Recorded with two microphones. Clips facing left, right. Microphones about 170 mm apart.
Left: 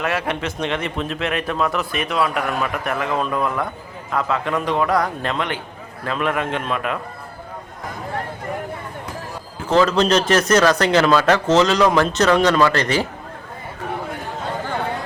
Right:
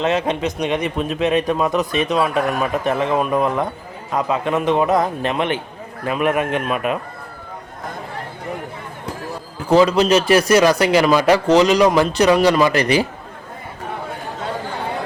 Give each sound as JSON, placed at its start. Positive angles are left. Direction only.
{"t": 0.0, "sound": "speech", "side_deg": -20}
{"t": 9.6, "sound": "speech", "side_deg": -10}